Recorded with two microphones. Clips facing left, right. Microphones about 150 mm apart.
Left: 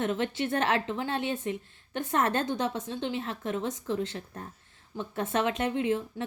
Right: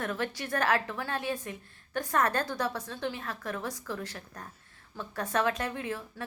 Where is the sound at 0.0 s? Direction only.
25° left (ahead or behind).